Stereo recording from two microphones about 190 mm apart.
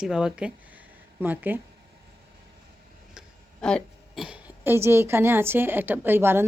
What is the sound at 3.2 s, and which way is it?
A woman's voice, 5° left (ahead or behind).